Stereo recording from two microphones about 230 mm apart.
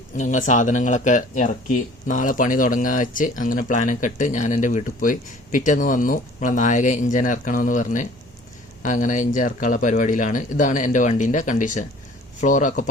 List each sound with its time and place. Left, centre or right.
0.2 s speech: left